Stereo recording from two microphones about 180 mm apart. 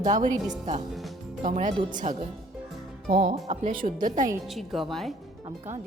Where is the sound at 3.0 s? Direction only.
55° right (ahead or behind).